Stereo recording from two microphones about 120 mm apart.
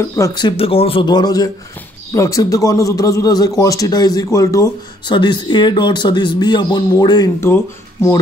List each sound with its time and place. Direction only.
0.0 s a man's voice: 20° left (ahead or behind)
0.3 s speech: 35° left (ahead or behind)
0.6 s speech: 50° left (ahead or behind)
1.0 s a man's voice: 35° left (ahead or behind)
5.0 s speech: 40° left (ahead or behind)
7.3 s a man's voice: 20° left (ahead or behind)